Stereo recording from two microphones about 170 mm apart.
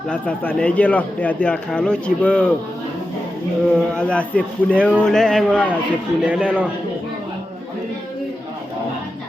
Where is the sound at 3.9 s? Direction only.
5° left (ahead or behind).